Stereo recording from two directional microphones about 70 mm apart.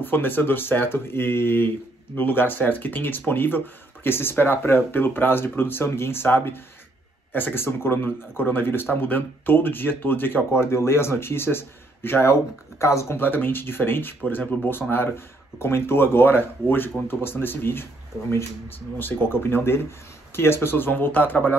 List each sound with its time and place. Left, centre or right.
0.0 s speech: left
13.2 s speech: left
18.9 s speech: left